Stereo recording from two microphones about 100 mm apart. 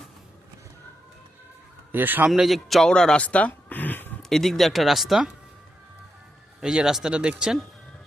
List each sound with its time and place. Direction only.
1.9 s a man's voice: 20° right (ahead or behind)
2.3 s speech: centre (ahead or behind); by 4.1 s 20° left (ahead or behind)
4.2 s speech: 5° left (ahead or behind)
6.6 s speech: 5° right (ahead or behind)